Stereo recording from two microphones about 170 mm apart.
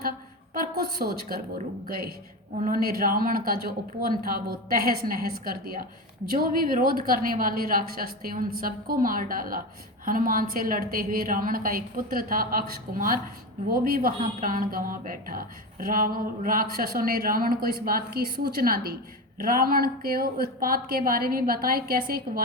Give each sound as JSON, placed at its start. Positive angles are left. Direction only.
{"t": 0.5, "sound": "a woman's voice", "side_deg": -60}